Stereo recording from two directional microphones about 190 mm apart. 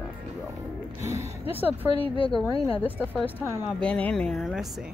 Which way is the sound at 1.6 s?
30° left (ahead or behind).